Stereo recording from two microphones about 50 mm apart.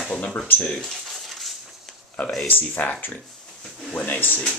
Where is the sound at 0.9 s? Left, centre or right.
Centre.